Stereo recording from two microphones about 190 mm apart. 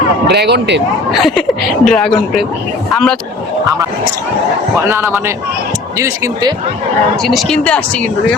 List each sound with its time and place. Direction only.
0.3 s speech: 60° right (ahead or behind)
1.1 s speech: centre (ahead or behind)
4.9 s speech: 15° right (ahead or behind)
7.2 s speech: centre (ahead or behind)